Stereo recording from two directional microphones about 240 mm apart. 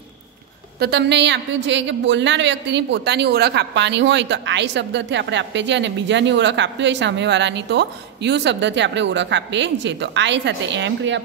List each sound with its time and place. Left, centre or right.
0.7 s a woman's voice: right